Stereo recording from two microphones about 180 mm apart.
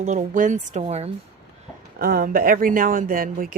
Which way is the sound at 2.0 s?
55° right (ahead or behind).